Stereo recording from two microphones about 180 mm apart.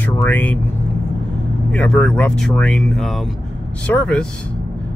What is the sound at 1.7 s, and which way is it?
Speech, 5° left (ahead or behind).